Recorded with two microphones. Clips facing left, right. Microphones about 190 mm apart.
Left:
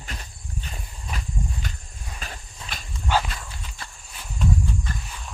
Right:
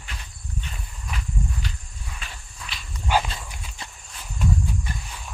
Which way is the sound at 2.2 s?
40° left (ahead or behind).